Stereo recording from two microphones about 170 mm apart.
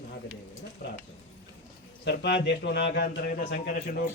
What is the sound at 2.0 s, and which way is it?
A man's voice, 80° left.